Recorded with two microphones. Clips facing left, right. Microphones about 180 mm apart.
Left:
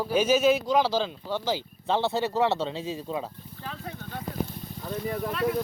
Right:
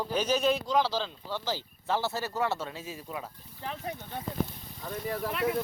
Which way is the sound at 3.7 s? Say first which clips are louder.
Right 1 dB; 20° right (ahead or behind).